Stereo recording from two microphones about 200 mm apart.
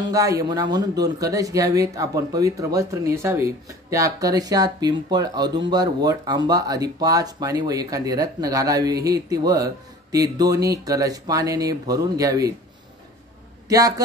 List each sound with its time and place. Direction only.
0.0 s speech: 15° right (ahead or behind)
13.7 s speech: 15° right (ahead or behind)